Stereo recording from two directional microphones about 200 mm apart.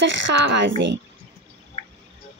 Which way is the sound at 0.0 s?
65° right (ahead or behind).